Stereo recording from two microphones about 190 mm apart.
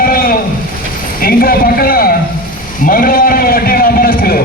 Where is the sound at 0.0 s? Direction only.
50° left (ahead or behind).